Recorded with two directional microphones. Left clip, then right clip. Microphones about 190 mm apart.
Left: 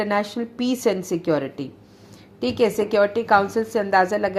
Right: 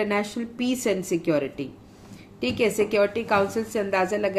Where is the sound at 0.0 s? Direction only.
20° left (ahead or behind).